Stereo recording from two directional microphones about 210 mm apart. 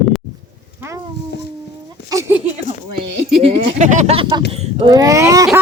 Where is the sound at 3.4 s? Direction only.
25° right (ahead or behind).